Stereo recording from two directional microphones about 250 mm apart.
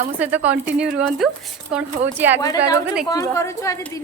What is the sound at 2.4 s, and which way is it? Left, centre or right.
Speech, centre.